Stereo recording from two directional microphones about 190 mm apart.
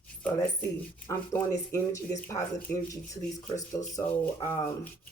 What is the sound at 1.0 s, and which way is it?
Speech, 15° left (ahead or behind).